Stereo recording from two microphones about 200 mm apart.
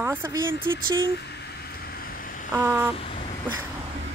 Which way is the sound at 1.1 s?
55° left (ahead or behind).